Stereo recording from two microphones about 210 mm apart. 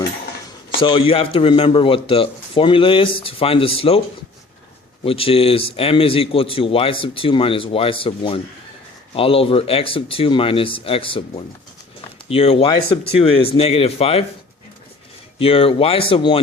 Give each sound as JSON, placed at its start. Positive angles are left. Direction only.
{"t": 0.8, "sound": "speech", "side_deg": 25}
{"t": 5.0, "sound": "speech", "side_deg": 25}
{"t": 15.4, "sound": "speech", "side_deg": 25}